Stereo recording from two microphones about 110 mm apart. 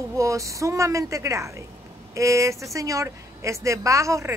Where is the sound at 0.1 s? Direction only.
30° right (ahead or behind).